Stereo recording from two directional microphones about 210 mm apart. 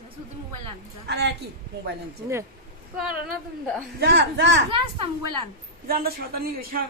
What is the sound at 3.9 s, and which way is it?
Speech, 55° right (ahead or behind).